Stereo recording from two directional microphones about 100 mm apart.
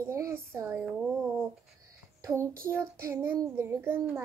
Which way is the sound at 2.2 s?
30° right (ahead or behind).